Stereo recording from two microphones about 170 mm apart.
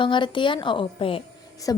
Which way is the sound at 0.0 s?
30° left (ahead or behind).